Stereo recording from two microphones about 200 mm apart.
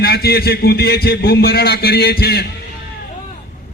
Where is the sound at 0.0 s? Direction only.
50° left (ahead or behind).